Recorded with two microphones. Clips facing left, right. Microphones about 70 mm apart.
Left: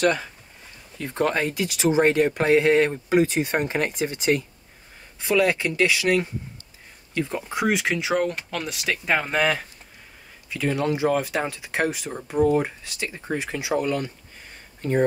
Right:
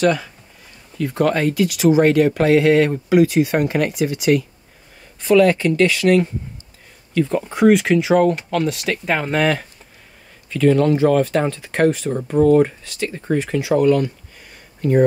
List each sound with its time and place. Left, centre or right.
0.9 s speech: left
5.2 s speech: centre
7.3 s speech: centre
14.8 s speech: left